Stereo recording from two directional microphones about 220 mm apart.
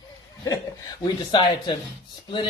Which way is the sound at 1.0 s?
20° left (ahead or behind).